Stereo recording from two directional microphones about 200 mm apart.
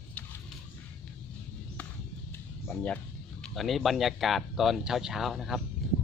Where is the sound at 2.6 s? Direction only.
10° left (ahead or behind).